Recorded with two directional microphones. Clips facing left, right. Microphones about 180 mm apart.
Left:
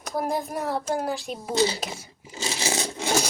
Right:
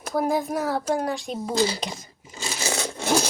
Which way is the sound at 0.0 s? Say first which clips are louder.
Right 4 dB; centre (ahead or behind).